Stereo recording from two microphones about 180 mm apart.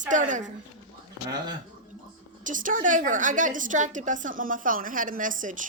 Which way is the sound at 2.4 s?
45° right (ahead or behind).